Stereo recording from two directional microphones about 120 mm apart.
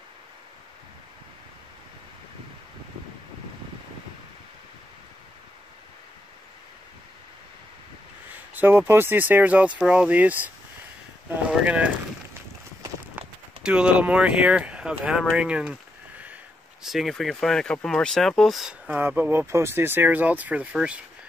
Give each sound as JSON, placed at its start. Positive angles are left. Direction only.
{"t": 8.3, "sound": "speech", "side_deg": -15}
{"t": 11.2, "sound": "a sound", "side_deg": -10}
{"t": 13.6, "sound": "speech", "side_deg": -5}